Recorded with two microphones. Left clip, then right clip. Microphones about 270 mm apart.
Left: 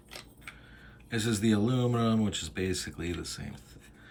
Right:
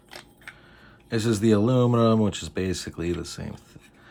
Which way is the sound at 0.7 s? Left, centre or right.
Centre.